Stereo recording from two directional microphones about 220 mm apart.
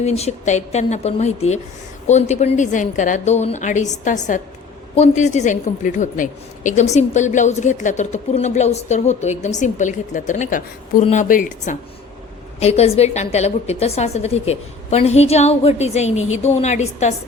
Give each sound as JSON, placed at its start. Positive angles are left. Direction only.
{"t": 0.0, "sound": "a woman's voice", "side_deg": 30}